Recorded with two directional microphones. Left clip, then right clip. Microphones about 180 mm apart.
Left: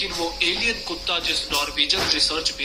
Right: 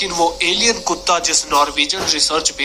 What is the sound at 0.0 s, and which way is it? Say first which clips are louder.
A man's voice: right 7 dB; 45° right (ahead or behind).